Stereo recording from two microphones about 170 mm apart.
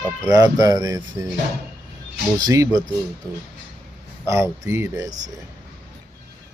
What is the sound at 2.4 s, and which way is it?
Speech, 20° right (ahead or behind).